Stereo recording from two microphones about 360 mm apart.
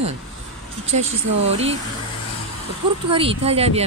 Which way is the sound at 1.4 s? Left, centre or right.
Centre.